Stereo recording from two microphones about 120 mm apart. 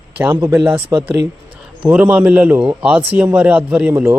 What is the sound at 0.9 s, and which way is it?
Speech, 30° right (ahead or behind).